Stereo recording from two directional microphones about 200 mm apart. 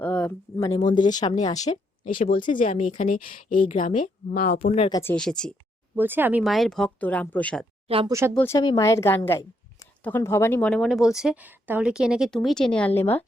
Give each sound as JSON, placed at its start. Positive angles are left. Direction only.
{"t": 0.0, "sound": "a sound", "side_deg": 5}
{"t": 0.3, "sound": "a woman's voice", "side_deg": 15}
{"t": 1.6, "sound": "speech", "side_deg": 40}
{"t": 4.9, "sound": "a woman's voice", "side_deg": 15}
{"t": 5.1, "sound": "speech", "side_deg": 5}
{"t": 6.0, "sound": "speech", "side_deg": -10}
{"t": 7.9, "sound": "speech", "side_deg": -25}
{"t": 8.3, "sound": "a woman's voice", "side_deg": 10}
{"t": 8.5, "sound": "a woman's voice", "side_deg": 20}